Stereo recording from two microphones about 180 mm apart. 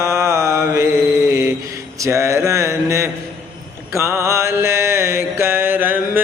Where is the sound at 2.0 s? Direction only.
15° right (ahead or behind).